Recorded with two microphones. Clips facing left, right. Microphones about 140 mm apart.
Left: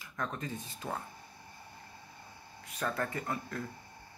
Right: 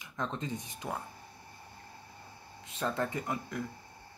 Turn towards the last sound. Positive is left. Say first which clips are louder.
# right 1 dB
turn(degrees=-15)  # may be behind; listen again after turning